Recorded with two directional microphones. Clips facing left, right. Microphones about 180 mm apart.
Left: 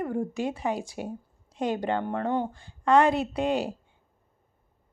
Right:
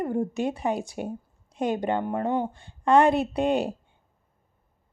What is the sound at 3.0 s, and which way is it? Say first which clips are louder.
Speech: right 3 dB; 55° right (ahead or behind).